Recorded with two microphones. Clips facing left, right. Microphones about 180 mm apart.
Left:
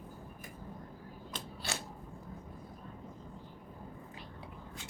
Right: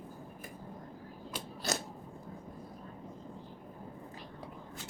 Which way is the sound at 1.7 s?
40° right (ahead or behind).